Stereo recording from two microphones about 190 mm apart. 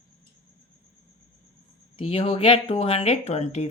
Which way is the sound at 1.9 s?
30° left (ahead or behind).